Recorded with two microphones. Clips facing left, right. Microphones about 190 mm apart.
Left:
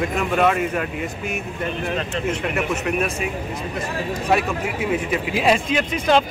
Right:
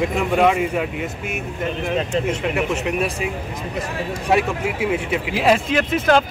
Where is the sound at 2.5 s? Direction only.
10° right (ahead or behind).